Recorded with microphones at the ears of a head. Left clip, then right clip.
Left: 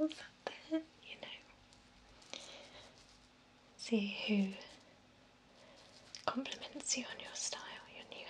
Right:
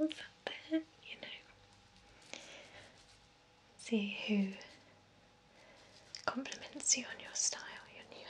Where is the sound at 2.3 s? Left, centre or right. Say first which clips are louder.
Left 1 dB; centre.